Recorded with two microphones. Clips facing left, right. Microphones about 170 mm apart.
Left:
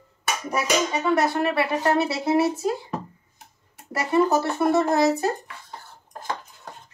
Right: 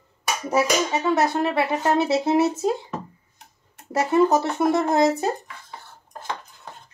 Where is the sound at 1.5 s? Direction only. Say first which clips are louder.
Even; 20° right (ahead or behind).